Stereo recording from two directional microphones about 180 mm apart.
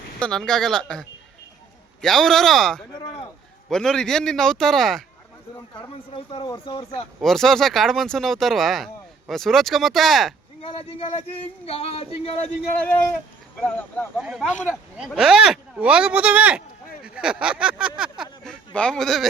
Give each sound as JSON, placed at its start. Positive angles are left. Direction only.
{"t": 0.2, "sound": "speech", "side_deg": 5}
{"t": 2.9, "sound": "speech", "side_deg": 25}
{"t": 3.7, "sound": "speech", "side_deg": 5}
{"t": 6.1, "sound": "speech", "side_deg": 30}
{"t": 7.2, "sound": "speech", "side_deg": 0}
{"t": 10.6, "sound": "speech", "side_deg": 30}
{"t": 13.6, "sound": "speech", "side_deg": 10}